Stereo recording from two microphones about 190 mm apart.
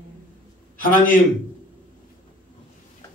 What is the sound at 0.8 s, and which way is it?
Speech, 50° left (ahead or behind).